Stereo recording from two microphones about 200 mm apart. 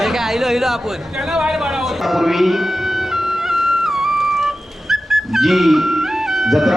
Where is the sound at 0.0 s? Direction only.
Centre (ahead or behind).